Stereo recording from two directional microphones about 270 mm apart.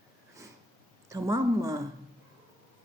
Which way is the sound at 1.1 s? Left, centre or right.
Centre.